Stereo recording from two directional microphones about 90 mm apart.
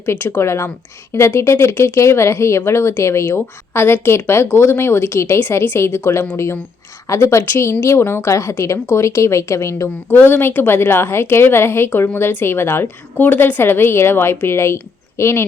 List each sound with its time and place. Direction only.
0.0 s a woman's voice: 25° left (ahead or behind)